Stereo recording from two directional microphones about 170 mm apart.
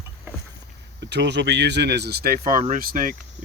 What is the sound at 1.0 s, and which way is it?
Speech, 90° right.